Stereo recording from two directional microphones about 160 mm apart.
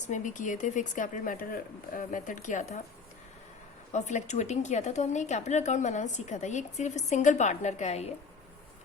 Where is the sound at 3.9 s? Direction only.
45° left (ahead or behind).